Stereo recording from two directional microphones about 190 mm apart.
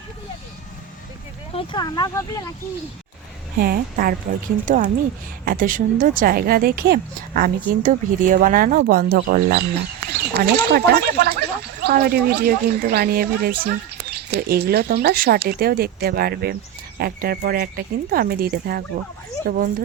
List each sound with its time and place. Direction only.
1.5 s speech: 25° left (ahead or behind)
3.6 s a woman's voice: 50° right (ahead or behind)